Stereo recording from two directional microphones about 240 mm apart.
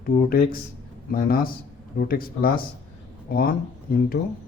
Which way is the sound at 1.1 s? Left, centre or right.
Left.